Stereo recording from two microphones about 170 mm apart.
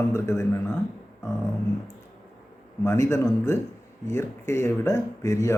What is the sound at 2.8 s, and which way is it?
Speech, 15° left (ahead or behind).